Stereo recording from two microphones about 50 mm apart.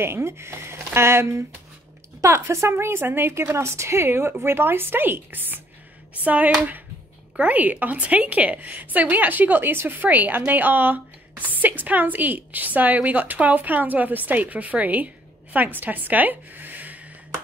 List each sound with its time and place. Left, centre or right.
0.0 s a woman's voice: right
2.7 s a woman's voice: right
3.5 s a woman's voice: right